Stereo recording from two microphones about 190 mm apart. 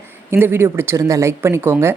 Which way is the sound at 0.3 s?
10° right (ahead or behind).